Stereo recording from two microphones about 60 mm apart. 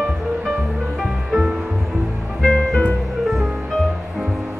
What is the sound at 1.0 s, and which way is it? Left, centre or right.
Music, centre.